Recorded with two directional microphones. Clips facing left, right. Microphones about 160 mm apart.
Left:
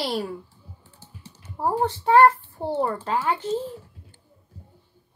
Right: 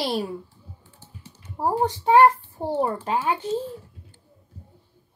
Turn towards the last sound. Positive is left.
turn(degrees=-20)  # may be behind; listen again after turning